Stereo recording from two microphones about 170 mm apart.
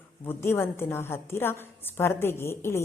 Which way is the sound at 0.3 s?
15° left (ahead or behind).